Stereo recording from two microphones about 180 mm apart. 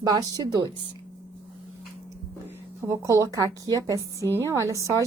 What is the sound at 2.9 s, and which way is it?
A woman's voice, 15° right (ahead or behind).